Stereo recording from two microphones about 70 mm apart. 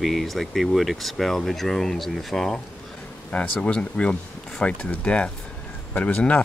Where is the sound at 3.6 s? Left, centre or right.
Centre.